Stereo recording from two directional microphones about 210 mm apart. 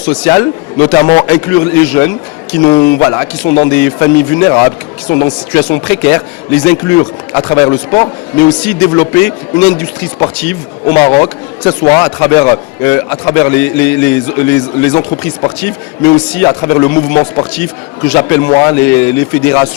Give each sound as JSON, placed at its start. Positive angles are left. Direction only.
{"t": 0.0, "sound": "a man's voice", "side_deg": 10}
{"t": 11.9, "sound": "speech", "side_deg": 25}
{"t": 12.8, "sound": "a man's voice", "side_deg": 10}